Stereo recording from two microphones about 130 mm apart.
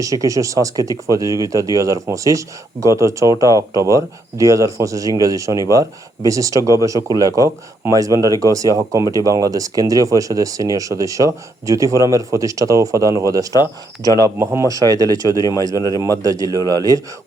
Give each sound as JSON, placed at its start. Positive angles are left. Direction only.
{"t": 0.0, "sound": "speech", "side_deg": -25}